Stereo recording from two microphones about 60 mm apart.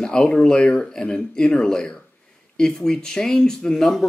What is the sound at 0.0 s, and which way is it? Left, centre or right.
Speech, centre.